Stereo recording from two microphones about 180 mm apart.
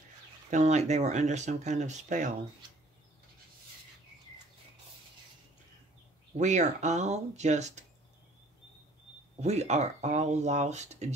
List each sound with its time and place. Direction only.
0.5 s speech: 40° right (ahead or behind)
6.3 s speech: 40° right (ahead or behind)
9.4 s speech: 40° right (ahead or behind)